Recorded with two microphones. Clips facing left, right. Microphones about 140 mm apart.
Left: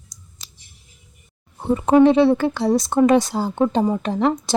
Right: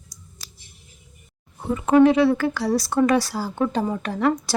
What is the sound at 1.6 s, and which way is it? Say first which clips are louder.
Speech: left 2 dB; 30° left (ahead or behind).